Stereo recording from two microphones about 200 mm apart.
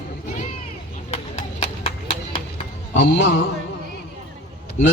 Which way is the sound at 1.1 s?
35° left (ahead or behind).